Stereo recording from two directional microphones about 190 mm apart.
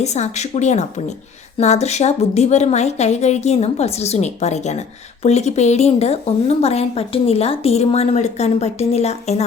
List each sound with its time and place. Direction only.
0.0 s a woman's voice: 35° left (ahead or behind)